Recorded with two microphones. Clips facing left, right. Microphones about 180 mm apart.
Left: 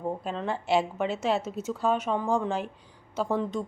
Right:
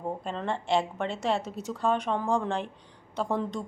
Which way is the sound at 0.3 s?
5° left (ahead or behind).